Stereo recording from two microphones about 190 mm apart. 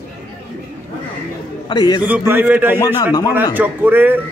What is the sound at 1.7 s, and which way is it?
Speech, 20° left (ahead or behind).